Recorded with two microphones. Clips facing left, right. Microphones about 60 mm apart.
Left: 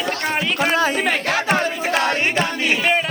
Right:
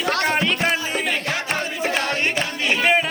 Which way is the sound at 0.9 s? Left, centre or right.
Left.